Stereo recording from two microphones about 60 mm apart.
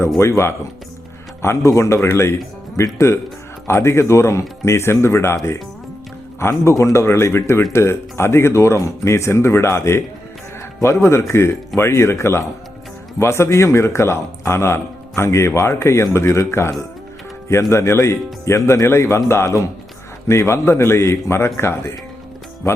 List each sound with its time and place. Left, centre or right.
0.2 s a man's voice: left
7.0 s a man's voice: left